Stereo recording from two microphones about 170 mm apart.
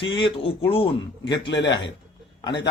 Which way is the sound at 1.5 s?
90° left.